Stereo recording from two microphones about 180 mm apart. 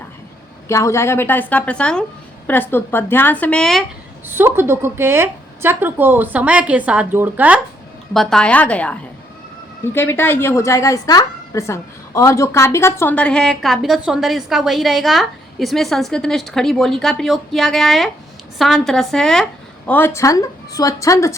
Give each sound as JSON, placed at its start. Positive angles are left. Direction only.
{"t": 0.7, "sound": "speech", "side_deg": 15}
{"t": 4.3, "sound": "a woman's voice", "side_deg": -10}